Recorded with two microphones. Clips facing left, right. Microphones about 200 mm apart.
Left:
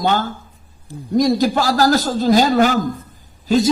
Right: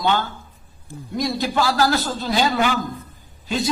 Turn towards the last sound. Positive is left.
turn(degrees=40)  # may be behind; listen again after turning